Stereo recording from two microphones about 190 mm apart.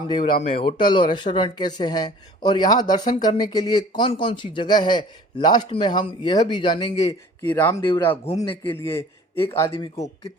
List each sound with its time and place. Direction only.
0.4 s speech: 30° left (ahead or behind)
7.5 s speech: 10° left (ahead or behind)
8.4 s speech: 25° left (ahead or behind)
8.7 s a man's voice: 15° left (ahead or behind)
9.7 s speech: 30° left (ahead or behind)